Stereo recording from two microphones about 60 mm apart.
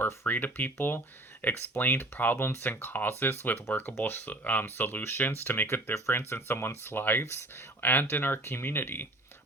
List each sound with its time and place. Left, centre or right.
0.0 s speech: left